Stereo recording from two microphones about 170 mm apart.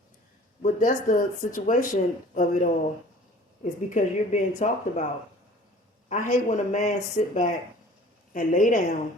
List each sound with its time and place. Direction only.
0.6 s speech: 50° left (ahead or behind)
3.6 s speech: 45° left (ahead or behind)
6.1 s speech: 45° left (ahead or behind)